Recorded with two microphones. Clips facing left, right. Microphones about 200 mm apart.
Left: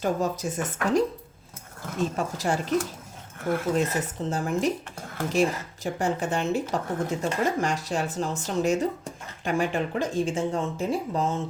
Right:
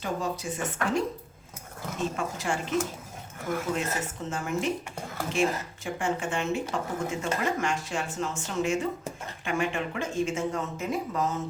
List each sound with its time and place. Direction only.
0.0 s speech: 45° left (ahead or behind)
2.1 s speech: 40° left (ahead or behind)
3.8 s speech: 35° left (ahead or behind)